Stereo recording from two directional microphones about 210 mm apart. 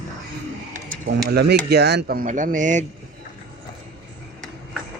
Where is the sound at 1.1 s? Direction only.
55° right (ahead or behind); by 2.8 s 35° right (ahead or behind).